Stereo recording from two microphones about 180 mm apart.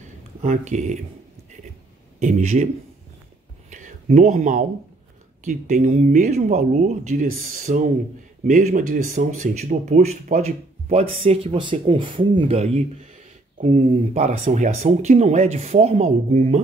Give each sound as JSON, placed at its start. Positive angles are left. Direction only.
{"t": 0.4, "sound": "speech", "side_deg": -40}
{"t": 2.1, "sound": "speech", "side_deg": -40}
{"t": 3.7, "sound": "a sound", "side_deg": -45}
{"t": 5.4, "sound": "speech", "side_deg": -45}